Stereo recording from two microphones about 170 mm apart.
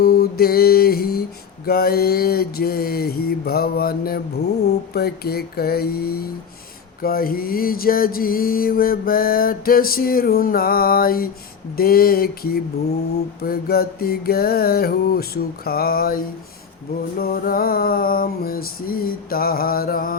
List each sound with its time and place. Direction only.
0.0 s mantra: 65° left (ahead or behind)
1.6 s music: 65° left (ahead or behind)